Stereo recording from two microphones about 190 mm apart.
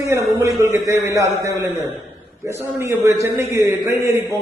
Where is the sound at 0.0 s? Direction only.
15° right (ahead or behind).